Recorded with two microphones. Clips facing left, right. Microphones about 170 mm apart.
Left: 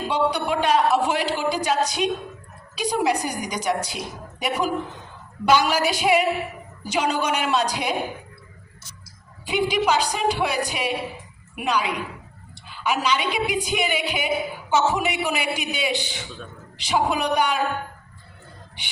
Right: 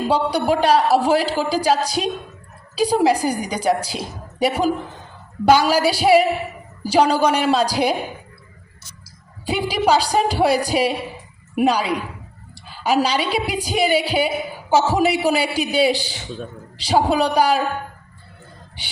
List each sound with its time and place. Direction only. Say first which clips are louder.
0.1 s a man's voice: right 3 dB; 35° right (ahead or behind)
9.5 s a man's voice: right 3 dB; 35° right (ahead or behind)